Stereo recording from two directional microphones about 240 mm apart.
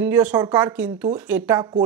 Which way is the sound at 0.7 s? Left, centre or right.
Centre.